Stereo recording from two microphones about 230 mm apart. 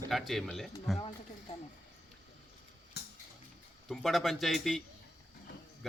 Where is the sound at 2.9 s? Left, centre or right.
Left.